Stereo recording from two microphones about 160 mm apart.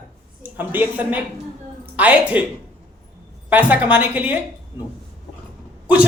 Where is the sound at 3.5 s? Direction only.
10° right (ahead or behind).